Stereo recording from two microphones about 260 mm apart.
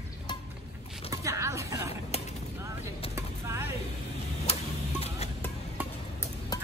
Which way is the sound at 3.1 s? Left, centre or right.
Centre.